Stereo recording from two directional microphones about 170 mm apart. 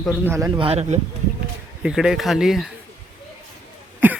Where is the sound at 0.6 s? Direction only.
40° right (ahead or behind).